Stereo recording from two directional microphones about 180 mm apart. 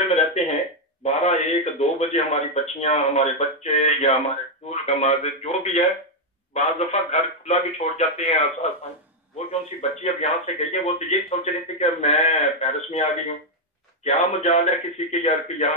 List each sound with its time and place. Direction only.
0.0 s a sound: 35° left (ahead or behind)
2.1 s speech: 35° left (ahead or behind)
9.5 s speech: 35° left (ahead or behind)